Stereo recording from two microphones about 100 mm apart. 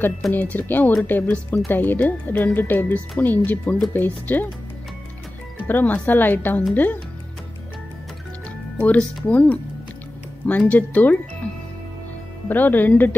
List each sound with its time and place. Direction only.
0.3 s a woman's voice: 20° left (ahead or behind)
5.7 s a woman's voice: 20° left (ahead or behind)
8.7 s a woman's voice: 15° left (ahead or behind)
10.7 s a woman's voice: 15° left (ahead or behind)
12.4 s a woman's voice: 20° left (ahead or behind)